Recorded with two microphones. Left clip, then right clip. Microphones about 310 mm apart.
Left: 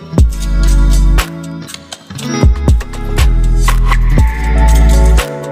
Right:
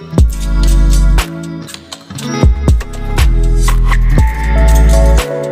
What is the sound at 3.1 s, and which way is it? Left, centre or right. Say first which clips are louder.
Music: right 1 dB; centre.